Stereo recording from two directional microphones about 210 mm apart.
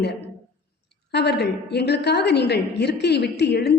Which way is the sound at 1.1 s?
50° left (ahead or behind).